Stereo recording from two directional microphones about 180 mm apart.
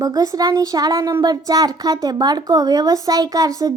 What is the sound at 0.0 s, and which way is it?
Speech, 20° right (ahead or behind).